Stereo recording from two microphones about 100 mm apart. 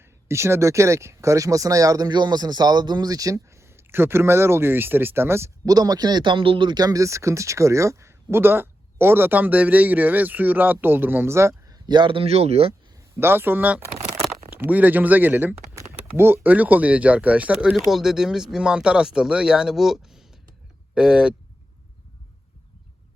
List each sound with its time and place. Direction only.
0.0 s speech: 25° right (ahead or behind)
5.6 s speech: 40° right (ahead or behind)
11.9 s speech: 55° right (ahead or behind); by 12.7 s 85° right
13.1 s speech: 20° right (ahead or behind)
17.7 s speech: 5° right (ahead or behind)